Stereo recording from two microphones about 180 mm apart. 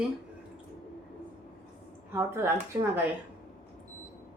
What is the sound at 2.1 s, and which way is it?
Speech, 15° right (ahead or behind).